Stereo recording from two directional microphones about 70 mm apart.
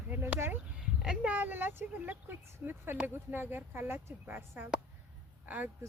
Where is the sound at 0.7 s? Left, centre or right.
Centre.